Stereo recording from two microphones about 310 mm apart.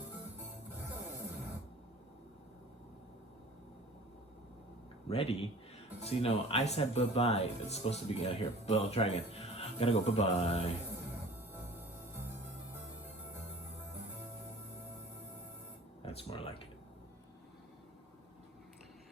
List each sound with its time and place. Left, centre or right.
5.0 s speech: centre
16.0 s speech: centre